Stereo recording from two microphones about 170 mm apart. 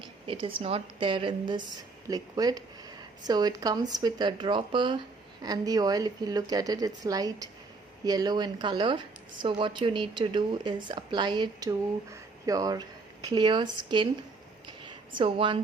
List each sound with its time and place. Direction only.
0.3 s a woman's voice: 30° right (ahead or behind)